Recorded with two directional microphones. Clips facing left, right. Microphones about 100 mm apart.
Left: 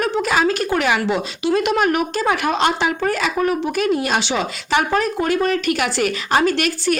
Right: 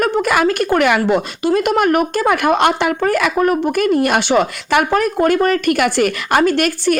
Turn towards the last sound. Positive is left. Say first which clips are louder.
# right 4 dB
turn(degrees=-50)  # may be behind; listen again after turning